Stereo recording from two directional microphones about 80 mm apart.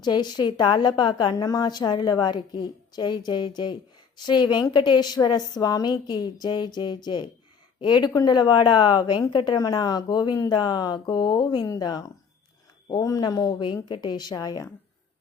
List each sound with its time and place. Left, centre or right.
0.0 s a woman's voice: left
8.1 s a woman's voice: left
9.6 s a woman's voice: left
11.6 s speech: left
13.8 s a woman's voice: left